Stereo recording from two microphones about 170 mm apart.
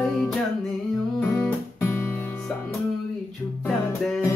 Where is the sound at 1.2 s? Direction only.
10° left (ahead or behind).